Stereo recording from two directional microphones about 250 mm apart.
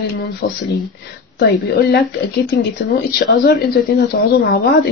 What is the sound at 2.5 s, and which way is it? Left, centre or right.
Speech, left.